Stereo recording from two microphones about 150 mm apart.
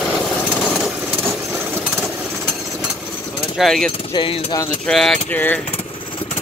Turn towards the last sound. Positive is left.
turn(degrees=10)  # may be behind; listen again after turning